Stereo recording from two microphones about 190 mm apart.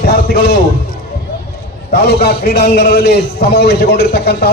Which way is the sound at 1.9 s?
60° left (ahead or behind).